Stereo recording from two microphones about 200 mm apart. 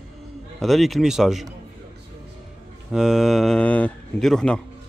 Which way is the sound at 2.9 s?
Centre (ahead or behind).